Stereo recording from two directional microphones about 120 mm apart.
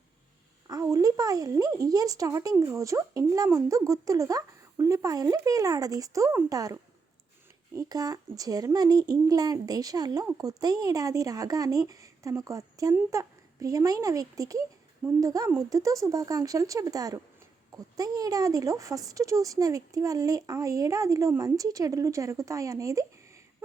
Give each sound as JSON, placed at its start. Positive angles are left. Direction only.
{"t": 0.7, "sound": "a child's voice", "side_deg": -30}